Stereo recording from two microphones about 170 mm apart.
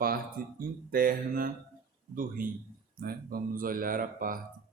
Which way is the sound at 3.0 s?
55° right (ahead or behind).